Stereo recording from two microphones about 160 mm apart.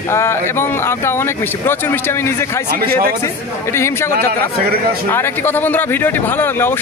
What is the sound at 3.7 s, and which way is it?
Speech, 15° left (ahead or behind).